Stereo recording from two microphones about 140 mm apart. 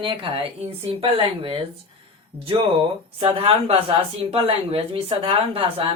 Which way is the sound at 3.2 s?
40° right (ahead or behind).